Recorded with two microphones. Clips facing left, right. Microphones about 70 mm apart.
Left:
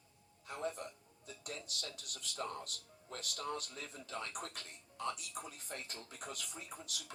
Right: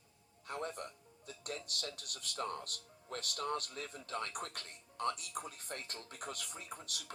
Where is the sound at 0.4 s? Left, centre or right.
Right.